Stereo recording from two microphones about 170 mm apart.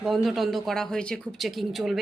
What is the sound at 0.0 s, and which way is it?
Speech, centre (ahead or behind).